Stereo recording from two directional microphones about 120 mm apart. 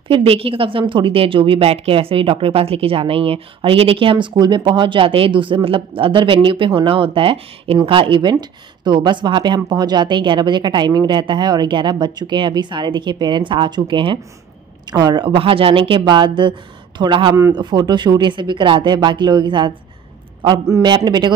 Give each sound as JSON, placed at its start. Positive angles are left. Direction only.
{"t": 0.1, "sound": "a woman's voice", "side_deg": -50}
{"t": 20.6, "sound": "a man's voice", "side_deg": -25}
{"t": 20.9, "sound": "speech", "side_deg": -35}